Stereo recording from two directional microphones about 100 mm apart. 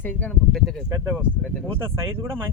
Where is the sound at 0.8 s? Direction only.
25° right (ahead or behind).